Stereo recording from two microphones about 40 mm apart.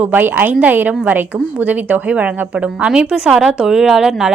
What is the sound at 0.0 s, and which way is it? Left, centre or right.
A woman's voice, right.